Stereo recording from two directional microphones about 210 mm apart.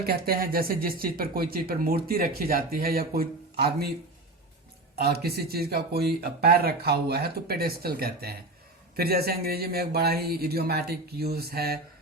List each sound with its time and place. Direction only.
0.0 s speech: 50° right (ahead or behind)
4.9 s speech: 50° right (ahead or behind)